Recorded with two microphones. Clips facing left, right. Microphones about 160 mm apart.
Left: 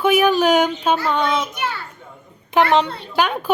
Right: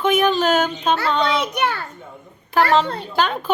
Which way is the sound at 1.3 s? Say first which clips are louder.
Right 2 dB; 65° right (ahead or behind).